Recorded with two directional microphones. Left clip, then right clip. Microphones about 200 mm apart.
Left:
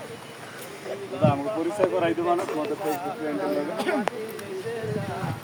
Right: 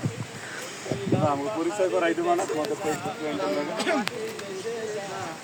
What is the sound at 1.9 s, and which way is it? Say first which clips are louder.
Speech: even; 45° left (ahead or behind).